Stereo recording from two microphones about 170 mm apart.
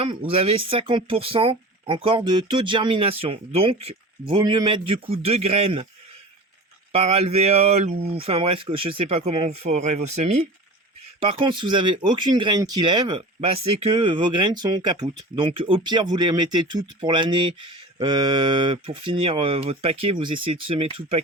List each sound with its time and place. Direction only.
0.0 s speech: 30° right (ahead or behind)
6.9 s speech: 35° right (ahead or behind)